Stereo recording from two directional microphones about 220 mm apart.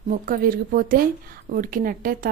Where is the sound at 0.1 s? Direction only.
40° right (ahead or behind).